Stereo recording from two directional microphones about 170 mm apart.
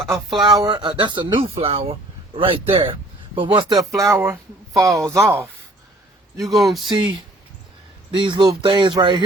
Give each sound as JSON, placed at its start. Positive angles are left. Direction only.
{"t": 0.3, "sound": "speech", "side_deg": -25}
{"t": 6.4, "sound": "speech", "side_deg": 0}
{"t": 8.1, "sound": "speech", "side_deg": -30}